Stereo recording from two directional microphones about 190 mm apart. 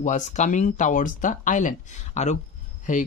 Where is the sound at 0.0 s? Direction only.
40° left (ahead or behind).